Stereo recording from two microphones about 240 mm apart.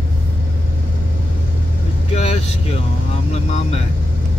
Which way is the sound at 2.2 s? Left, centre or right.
Left.